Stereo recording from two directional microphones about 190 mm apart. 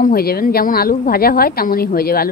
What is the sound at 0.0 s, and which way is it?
A woman's voice, 55° left (ahead or behind).